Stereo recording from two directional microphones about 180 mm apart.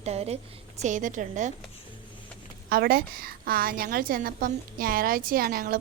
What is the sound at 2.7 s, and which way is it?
A woman's voice, 55° right (ahead or behind).